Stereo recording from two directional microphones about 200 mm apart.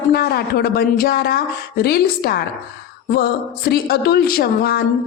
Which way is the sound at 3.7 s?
55° left (ahead or behind).